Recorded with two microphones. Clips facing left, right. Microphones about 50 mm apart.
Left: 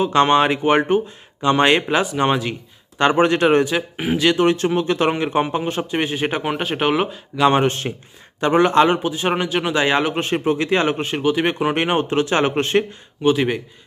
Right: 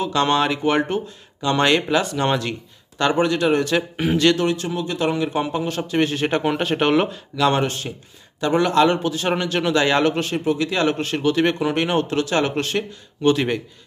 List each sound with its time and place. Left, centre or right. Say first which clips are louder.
0.0 s a man's voice: left 4 dB; left
3.0 s speech: left 3 dB; left
3.6 s speech: right 1 dB; centre
4.4 s a man's voice: left 5 dB; left; by 7.2 s centre
7.3 s a man's voice: left 3 dB; left
10.2 s a man's voice: left 2 dB; left; by 11.6 s centre
11.6 s a man's voice: left 1 dB; left
13.2 s speech: left 1 dB; centre